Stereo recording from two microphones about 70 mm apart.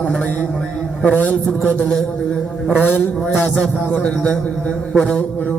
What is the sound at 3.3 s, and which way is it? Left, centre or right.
A man's voice, left.